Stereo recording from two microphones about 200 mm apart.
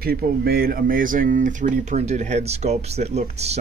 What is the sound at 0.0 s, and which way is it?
Speech, 50° right (ahead or behind).